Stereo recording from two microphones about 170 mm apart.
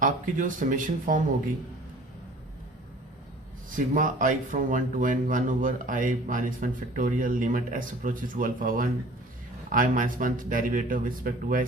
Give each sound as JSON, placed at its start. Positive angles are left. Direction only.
{"t": 0.0, "sound": "speech", "side_deg": -50}
{"t": 3.7, "sound": "speech", "side_deg": -50}